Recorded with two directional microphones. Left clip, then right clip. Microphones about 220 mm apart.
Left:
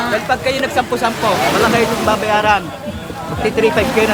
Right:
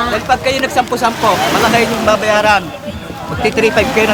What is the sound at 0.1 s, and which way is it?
Speech, 35° right (ahead or behind).